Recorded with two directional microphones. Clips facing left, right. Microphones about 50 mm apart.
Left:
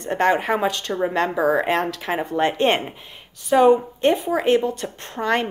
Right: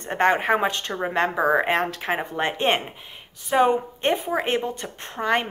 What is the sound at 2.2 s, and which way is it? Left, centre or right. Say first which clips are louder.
Speech: left 9 dB; centre.